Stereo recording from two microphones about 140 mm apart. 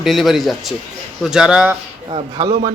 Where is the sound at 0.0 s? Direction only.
Centre (ahead or behind).